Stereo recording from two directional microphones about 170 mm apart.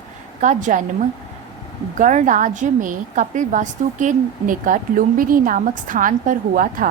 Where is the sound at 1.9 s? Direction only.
50° right (ahead or behind).